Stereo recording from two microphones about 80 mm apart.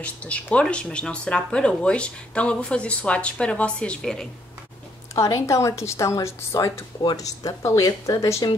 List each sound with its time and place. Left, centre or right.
0.0 s speech: centre
5.1 s a woman's voice: left